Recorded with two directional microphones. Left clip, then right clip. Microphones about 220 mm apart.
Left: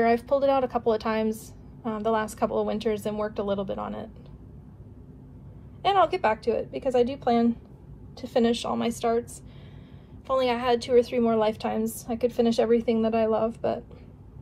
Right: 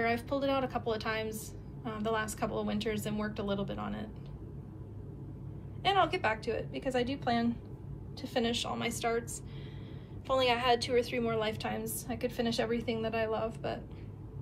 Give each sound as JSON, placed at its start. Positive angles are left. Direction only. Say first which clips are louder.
{"t": 0.0, "sound": "a woman's voice", "louder": "left 10 dB", "side_deg": 15}
{"t": 5.8, "sound": "a woman's voice", "louder": "left 7 dB", "side_deg": 15}